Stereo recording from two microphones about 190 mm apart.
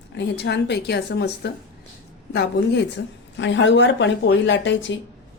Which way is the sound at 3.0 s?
70° left (ahead or behind).